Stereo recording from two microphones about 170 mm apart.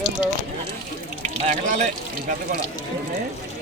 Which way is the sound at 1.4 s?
45° right (ahead or behind).